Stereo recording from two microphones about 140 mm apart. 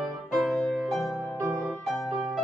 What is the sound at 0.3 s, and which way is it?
Music, centre (ahead or behind).